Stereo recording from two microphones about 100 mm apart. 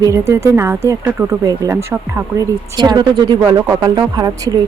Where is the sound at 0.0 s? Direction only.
30° right (ahead or behind).